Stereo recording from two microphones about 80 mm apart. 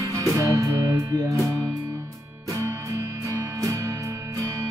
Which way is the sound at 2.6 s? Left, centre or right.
Right.